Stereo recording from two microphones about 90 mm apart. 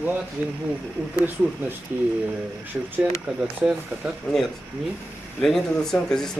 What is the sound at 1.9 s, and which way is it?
Speech, 25° right (ahead or behind).